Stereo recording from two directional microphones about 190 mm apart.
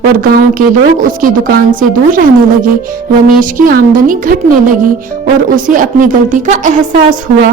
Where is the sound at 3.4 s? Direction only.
45° right (ahead or behind).